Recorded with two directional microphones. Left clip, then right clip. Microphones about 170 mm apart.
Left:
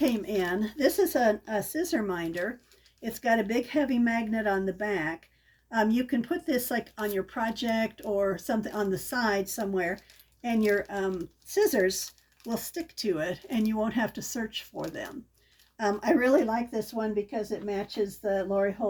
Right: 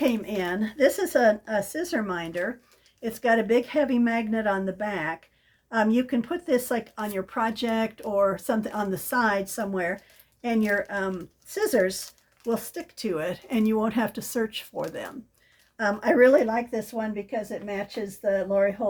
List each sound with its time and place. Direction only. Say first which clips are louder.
0.0 s speech: right 2 dB; 20° right (ahead or behind)
15.8 s speech: right 6 dB; 15° right (ahead or behind)